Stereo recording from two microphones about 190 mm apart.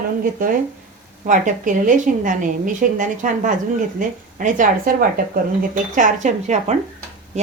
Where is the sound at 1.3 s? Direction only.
45° right (ahead or behind).